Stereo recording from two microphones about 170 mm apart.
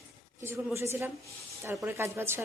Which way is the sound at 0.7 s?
15° right (ahead or behind).